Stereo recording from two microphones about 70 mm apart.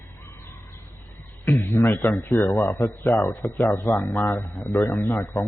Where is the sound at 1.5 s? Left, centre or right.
Left.